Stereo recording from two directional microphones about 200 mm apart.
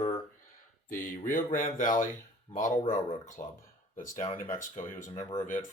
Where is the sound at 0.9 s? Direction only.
40° left (ahead or behind).